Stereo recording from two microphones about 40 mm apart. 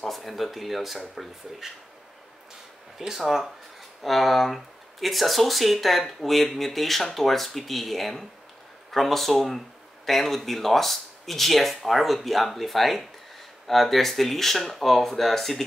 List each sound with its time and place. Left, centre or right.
0.0 s speech: centre
3.0 s speech: centre
4.0 s speech: centre